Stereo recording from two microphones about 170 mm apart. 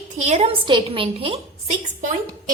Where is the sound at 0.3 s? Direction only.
35° right (ahead or behind).